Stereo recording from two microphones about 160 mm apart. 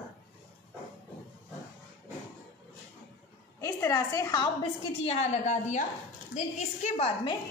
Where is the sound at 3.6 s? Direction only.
20° left (ahead or behind).